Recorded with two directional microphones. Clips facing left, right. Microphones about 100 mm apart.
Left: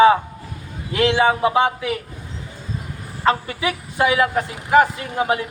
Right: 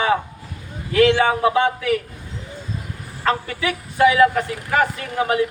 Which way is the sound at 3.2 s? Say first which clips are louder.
Left 2 dB; 20° left (ahead or behind).